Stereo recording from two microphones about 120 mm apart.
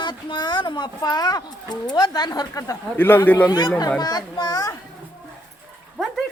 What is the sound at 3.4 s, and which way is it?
A child's voice, 35° left (ahead or behind).